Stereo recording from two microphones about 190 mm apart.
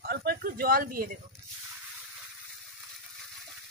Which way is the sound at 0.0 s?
55° right (ahead or behind).